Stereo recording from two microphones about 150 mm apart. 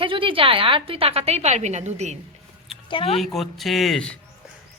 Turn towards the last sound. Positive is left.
turn(degrees=5)  # may be behind; listen again after turning